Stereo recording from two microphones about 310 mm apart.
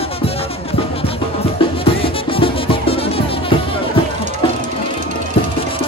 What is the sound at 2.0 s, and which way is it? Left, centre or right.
Music, centre.